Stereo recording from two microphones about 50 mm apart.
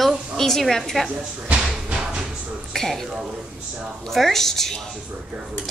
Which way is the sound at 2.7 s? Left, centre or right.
Centre.